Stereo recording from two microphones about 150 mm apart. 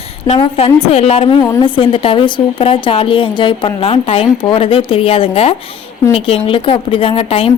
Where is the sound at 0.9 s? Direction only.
45° left (ahead or behind).